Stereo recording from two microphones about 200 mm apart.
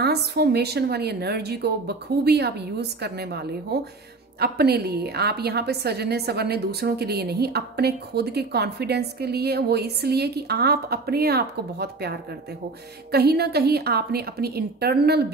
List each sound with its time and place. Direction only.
0.0 s a woman's voice: 55° right (ahead or behind)